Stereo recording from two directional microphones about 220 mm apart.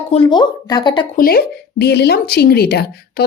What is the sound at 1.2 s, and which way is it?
Speech, 45° left (ahead or behind).